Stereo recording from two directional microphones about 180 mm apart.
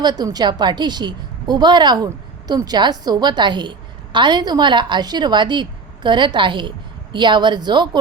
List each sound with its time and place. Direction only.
0.0 s a woman's voice: 25° right (ahead or behind)